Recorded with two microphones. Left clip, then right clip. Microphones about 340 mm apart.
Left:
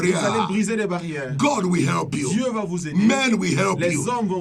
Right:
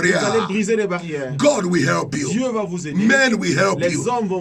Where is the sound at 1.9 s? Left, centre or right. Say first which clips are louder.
Right 3 dB; centre.